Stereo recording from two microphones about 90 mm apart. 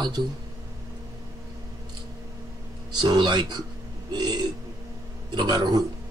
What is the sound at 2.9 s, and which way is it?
A man's voice, 55° right (ahead or behind).